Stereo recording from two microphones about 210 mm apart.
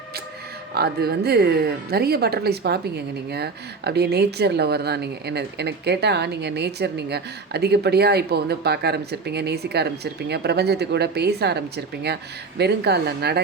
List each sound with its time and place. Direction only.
0.7 s speech: 50° right (ahead or behind)